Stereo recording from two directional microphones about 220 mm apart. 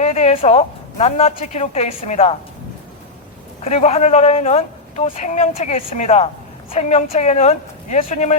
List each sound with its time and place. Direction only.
0.0 s speech: 30° left (ahead or behind)
3.6 s speech: 30° left (ahead or behind)